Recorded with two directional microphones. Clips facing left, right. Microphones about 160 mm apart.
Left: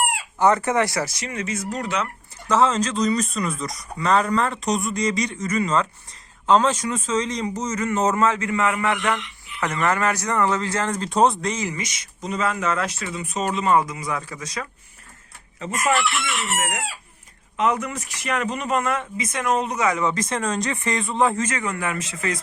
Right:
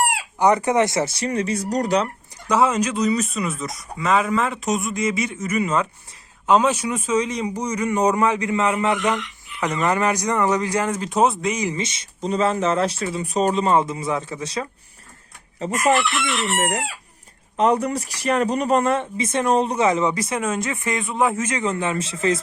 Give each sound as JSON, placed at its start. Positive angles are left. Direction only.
{"t": 0.3, "sound": "speech", "side_deg": -15}
{"t": 2.5, "sound": "speech", "side_deg": -10}
{"t": 11.7, "sound": "speech", "side_deg": -30}
{"t": 15.5, "sound": "chicken", "side_deg": -35}
{"t": 16.6, "sound": "speech", "side_deg": -35}
{"t": 20.1, "sound": "speech", "side_deg": -10}
{"t": 21.5, "sound": "speech", "side_deg": -20}